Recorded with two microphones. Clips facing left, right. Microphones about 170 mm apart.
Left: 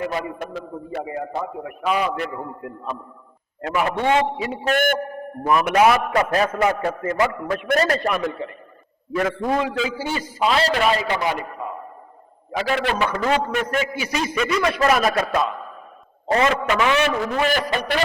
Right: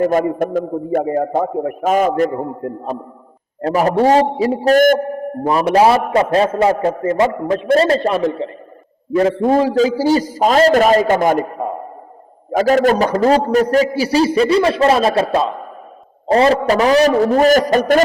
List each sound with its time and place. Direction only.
0.0 s a man's voice: 45° right (ahead or behind)